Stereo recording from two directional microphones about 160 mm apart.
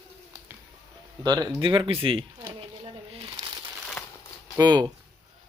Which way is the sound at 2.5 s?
35° right (ahead or behind).